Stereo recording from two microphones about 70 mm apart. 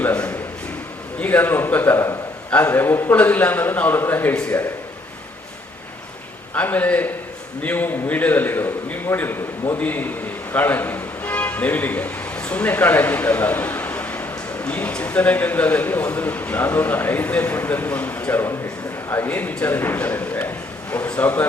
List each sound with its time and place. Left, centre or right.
0.0 s a man's voice: centre
4.4 s a man's voice: centre
6.5 s a man's voice: left